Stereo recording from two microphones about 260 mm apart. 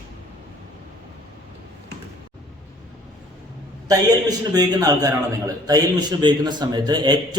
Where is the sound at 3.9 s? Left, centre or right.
Centre.